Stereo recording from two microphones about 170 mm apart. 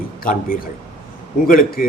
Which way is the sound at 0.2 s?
55° left (ahead or behind).